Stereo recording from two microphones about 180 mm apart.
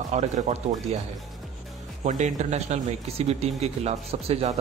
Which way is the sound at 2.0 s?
40° right (ahead or behind).